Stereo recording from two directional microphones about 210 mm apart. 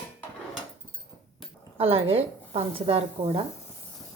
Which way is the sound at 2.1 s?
25° right (ahead or behind).